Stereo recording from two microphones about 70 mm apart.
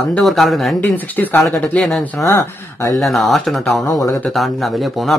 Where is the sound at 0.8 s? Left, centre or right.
Left.